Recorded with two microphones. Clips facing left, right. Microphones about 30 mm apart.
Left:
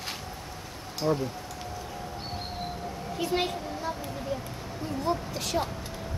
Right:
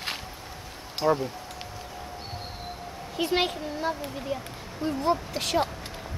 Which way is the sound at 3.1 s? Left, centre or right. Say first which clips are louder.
Right 3 dB; right.